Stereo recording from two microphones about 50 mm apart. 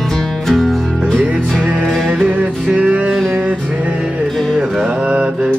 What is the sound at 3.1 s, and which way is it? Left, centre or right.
Music, centre.